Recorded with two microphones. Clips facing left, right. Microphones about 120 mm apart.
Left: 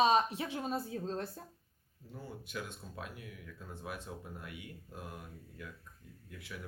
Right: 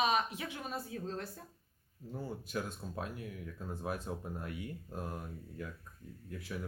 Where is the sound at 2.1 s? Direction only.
40° right (ahead or behind).